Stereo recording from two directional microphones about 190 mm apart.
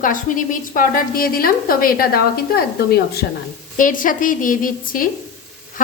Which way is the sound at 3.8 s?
45° left (ahead or behind).